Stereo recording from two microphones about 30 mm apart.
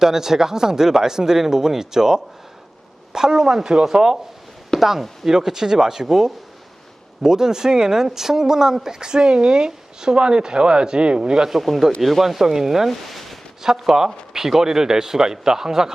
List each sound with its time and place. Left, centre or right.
0.0 s speech: centre
4.8 s speech: centre; by 11.4 s right
11.9 s speech: centre
12.9 s a sound: centre
13.6 s speech: centre